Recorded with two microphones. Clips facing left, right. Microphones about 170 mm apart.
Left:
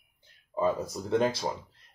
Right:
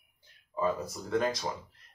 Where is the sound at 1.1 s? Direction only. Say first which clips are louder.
Left 3 dB; 30° left (ahead or behind).